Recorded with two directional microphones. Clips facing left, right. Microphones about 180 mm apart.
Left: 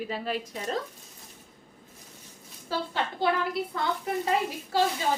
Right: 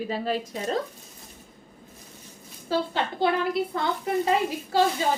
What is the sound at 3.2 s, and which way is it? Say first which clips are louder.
Speech: right 4 dB; 25° right (ahead or behind).